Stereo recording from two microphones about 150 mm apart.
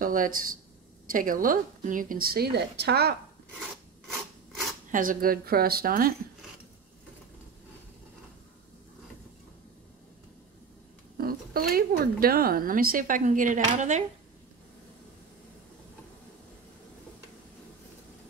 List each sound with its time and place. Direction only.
0.0 s speech: 65° right (ahead or behind); by 3.2 s 90° right
4.9 s speech: 70° right (ahead or behind)
11.1 s speech: 80° right; by 14.0 s 50° right (ahead or behind)